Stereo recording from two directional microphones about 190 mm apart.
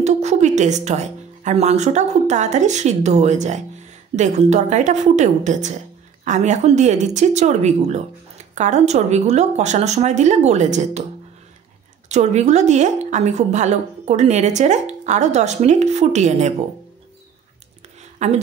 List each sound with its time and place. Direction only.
0.0 s a woman's voice: 35° right (ahead or behind)
12.1 s speech: 35° right (ahead or behind)
18.2 s speech: 40° right (ahead or behind)